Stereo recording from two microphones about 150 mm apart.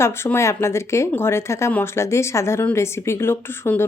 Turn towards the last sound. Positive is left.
turn(degrees=15)  # may be behind; listen again after turning